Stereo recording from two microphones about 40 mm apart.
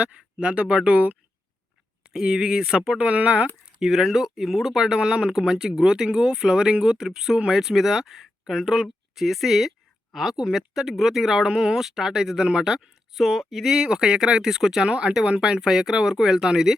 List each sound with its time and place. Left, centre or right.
0.0 s speech: right
2.1 s speech: centre
3.0 s speech: right
3.8 s speech: centre
13.1 s a sound: centre
13.7 s speech: centre
14.8 s speech: right